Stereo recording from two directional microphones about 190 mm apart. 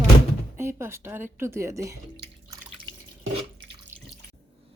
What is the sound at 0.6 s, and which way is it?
A woman's voice, 15° right (ahead or behind).